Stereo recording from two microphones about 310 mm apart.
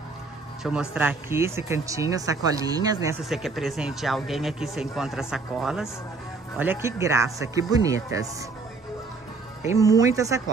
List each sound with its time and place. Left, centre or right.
0.7 s speech: centre
9.9 s speech: centre